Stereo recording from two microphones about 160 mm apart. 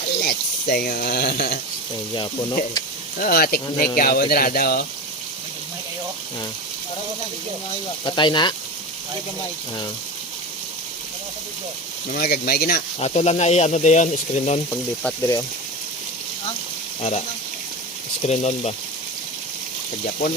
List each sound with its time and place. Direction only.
0.2 s speech: 70° left (ahead or behind)
2.1 s speech: 25° left (ahead or behind)
3.2 s speech: 70° left (ahead or behind)
8.0 s speech: 30° left (ahead or behind)
12.1 s speech: 70° left (ahead or behind)
13.0 s speech: 45° left (ahead or behind)
17.0 s speech: 45° left (ahead or behind)